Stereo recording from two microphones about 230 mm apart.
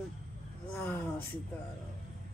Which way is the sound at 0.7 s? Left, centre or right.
Centre.